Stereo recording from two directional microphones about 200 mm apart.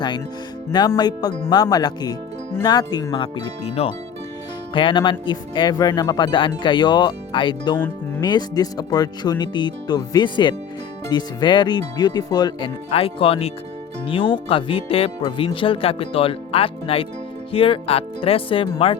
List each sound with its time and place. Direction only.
0.7 s speech: 20° left (ahead or behind)